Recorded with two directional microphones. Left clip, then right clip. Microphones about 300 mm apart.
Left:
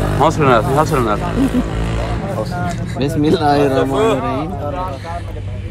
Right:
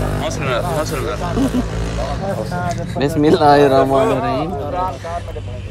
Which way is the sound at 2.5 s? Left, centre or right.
Right.